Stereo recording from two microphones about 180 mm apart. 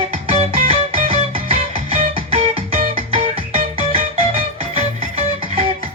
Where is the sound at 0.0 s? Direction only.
30° right (ahead or behind).